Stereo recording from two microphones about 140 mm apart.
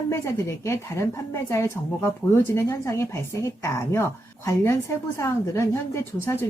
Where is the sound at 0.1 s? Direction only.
20° left (ahead or behind).